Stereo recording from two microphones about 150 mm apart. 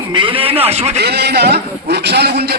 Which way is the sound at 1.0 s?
90° right.